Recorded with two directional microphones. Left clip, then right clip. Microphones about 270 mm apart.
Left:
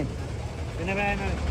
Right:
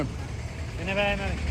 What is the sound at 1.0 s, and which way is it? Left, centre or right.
Speech, centre.